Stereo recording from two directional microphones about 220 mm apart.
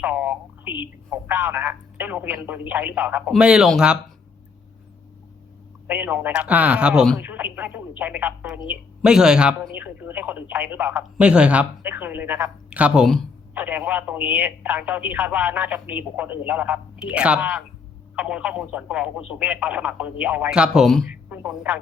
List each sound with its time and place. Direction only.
0.0 s speech: 5° right (ahead or behind)
5.9 s speech: 10° right (ahead or behind)